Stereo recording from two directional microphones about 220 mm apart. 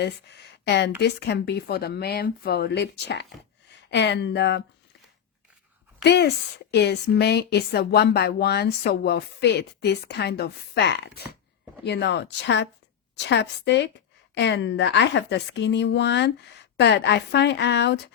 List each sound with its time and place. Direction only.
0.0 s a woman's voice: 50° left (ahead or behind)
6.0 s a woman's voice: 50° left (ahead or behind)